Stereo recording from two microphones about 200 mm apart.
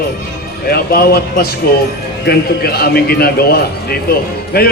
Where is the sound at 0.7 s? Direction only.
50° left (ahead or behind).